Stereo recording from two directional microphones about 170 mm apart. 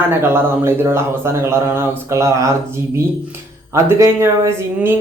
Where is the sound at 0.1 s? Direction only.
15° right (ahead or behind).